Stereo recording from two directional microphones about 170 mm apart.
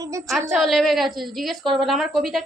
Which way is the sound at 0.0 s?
20° right (ahead or behind).